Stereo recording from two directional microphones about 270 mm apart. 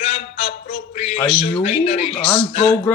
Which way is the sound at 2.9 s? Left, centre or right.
Centre.